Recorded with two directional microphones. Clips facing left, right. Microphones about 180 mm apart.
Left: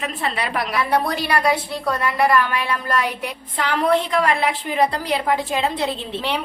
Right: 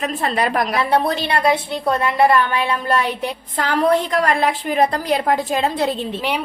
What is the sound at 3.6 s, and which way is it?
A woman's voice, 45° right (ahead or behind).